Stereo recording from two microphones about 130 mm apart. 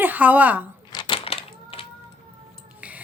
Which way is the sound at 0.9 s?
30° left (ahead or behind).